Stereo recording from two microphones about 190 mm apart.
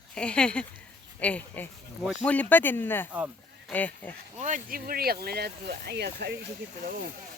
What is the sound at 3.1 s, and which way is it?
Sheep, 10° right (ahead or behind).